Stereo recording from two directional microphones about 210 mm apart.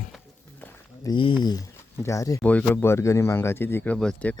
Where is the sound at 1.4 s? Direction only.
20° left (ahead or behind).